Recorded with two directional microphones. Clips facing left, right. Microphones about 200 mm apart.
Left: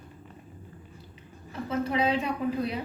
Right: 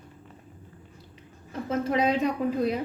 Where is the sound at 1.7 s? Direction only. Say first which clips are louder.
Right 2 dB; 45° right (ahead or behind).